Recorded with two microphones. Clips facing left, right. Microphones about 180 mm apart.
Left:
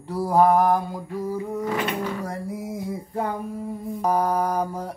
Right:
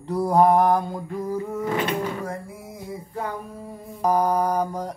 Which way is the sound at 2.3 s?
40° left (ahead or behind).